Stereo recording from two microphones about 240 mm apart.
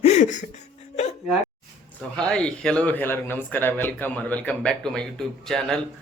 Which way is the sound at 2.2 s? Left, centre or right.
Centre.